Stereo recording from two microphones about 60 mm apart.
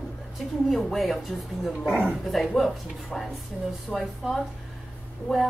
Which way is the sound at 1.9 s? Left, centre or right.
Centre.